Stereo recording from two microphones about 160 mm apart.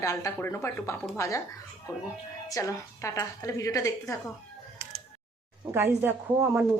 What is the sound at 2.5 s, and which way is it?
A woman's voice, 20° left (ahead or behind).